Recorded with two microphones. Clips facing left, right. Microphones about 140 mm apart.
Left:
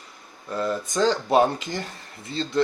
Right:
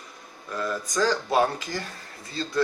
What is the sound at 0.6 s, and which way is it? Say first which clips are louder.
Speech: left 3 dB; 25° left (ahead or behind).